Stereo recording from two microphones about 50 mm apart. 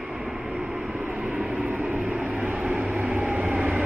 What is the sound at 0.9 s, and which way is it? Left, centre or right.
Vehicle, right.